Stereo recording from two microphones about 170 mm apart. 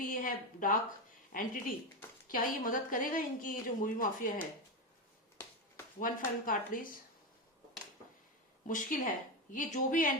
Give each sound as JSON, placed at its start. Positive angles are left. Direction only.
{"t": 0.0, "sound": "a sound", "side_deg": 55}
{"t": 1.3, "sound": "speech", "side_deg": 55}
{"t": 6.0, "sound": "speech", "side_deg": 55}
{"t": 8.6, "sound": "speech", "side_deg": 50}